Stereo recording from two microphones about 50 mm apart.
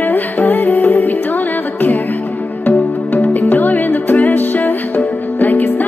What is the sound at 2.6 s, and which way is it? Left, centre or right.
Music, left.